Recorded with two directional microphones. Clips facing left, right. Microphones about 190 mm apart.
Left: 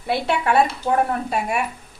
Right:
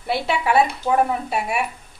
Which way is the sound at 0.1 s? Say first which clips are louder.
Even; centre (ahead or behind).